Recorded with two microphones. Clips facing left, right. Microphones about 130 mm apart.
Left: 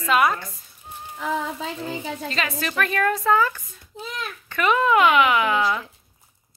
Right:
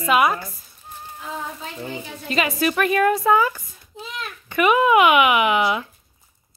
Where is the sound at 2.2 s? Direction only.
10° right (ahead or behind).